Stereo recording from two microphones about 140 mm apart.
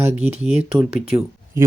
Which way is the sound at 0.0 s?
15° right (ahead or behind).